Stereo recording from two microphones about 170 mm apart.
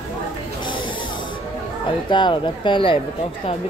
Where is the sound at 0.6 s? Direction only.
30° left (ahead or behind).